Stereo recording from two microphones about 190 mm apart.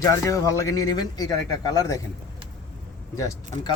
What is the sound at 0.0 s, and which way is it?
Speech, 15° left (ahead or behind).